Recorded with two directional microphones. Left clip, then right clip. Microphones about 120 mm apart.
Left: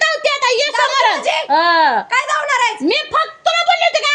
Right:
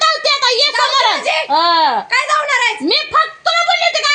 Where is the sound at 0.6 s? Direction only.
60° left (ahead or behind).